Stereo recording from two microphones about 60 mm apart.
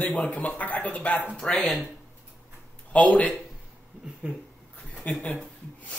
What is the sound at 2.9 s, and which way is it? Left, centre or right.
Speech, left.